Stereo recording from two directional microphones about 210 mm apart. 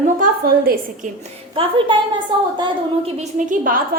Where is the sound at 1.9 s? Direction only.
25° right (ahead or behind).